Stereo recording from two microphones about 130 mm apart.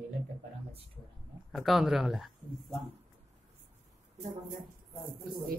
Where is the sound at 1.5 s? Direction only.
Centre (ahead or behind).